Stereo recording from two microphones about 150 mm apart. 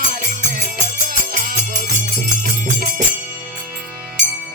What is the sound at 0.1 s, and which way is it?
Music, 65° right (ahead or behind).